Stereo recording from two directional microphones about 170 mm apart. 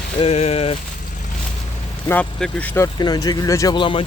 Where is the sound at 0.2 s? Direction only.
35° left (ahead or behind).